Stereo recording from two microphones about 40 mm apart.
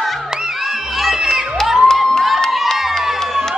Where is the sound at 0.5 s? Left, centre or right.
Centre.